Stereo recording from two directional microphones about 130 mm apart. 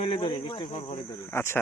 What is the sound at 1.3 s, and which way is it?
Speech, 20° left (ahead or behind).